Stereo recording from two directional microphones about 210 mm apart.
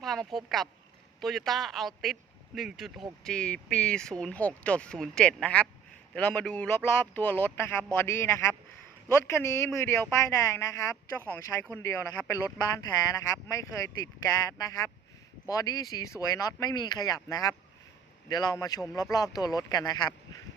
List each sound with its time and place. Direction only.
0.0 s a woman's voice: centre (ahead or behind)
13.5 s a woman's voice: 15° left (ahead or behind)